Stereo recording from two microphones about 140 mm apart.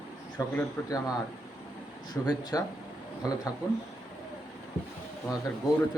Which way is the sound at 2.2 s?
25° left (ahead or behind).